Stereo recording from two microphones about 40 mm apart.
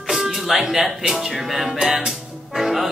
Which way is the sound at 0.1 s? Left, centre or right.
Centre.